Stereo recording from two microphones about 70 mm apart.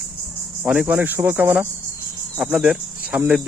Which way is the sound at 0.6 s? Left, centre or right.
Centre.